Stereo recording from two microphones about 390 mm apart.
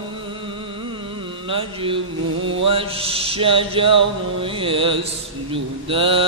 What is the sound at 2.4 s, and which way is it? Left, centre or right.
Mantra, right.